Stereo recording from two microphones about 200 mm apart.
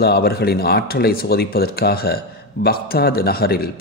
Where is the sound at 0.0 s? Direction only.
50° left (ahead or behind).